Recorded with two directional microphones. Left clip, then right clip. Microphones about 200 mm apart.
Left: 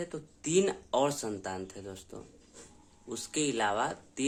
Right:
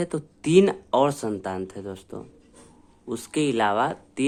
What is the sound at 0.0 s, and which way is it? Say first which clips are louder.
Speech: right 10 dB; 30° right (ahead or behind).